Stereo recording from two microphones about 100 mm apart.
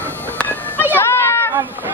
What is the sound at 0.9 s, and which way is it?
Children playing, 25° left (ahead or behind).